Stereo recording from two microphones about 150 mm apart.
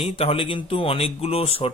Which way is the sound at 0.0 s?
40° left (ahead or behind).